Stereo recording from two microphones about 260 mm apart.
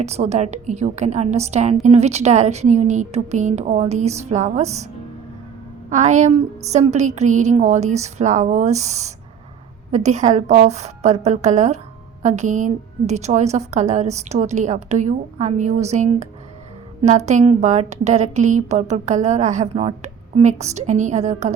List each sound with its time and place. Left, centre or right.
0.0 s a woman's voice: right
5.9 s a woman's voice: right